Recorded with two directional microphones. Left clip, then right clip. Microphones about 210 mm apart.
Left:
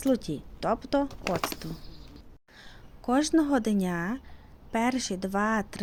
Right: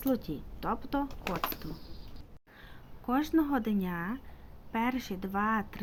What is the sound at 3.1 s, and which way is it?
Speech, 45° left (ahead or behind).